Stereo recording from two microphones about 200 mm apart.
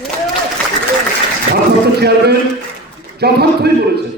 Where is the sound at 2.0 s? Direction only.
55° right (ahead or behind).